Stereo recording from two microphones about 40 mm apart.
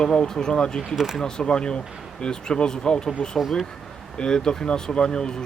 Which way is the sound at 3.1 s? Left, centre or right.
Centre.